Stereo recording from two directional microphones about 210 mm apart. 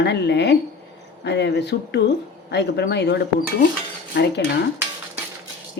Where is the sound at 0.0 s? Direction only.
55° left (ahead or behind).